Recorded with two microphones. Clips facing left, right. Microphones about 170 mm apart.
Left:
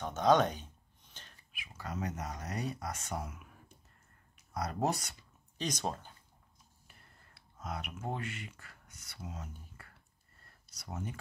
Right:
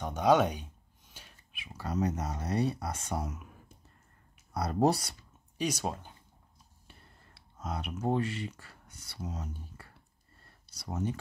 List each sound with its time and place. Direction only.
0.0 s a sound: 10° right (ahead or behind)
1.6 s speech: 30° right (ahead or behind)
4.6 s speech: 35° right (ahead or behind)
5.6 s speech: 10° right (ahead or behind)
7.5 s speech: 35° right (ahead or behind)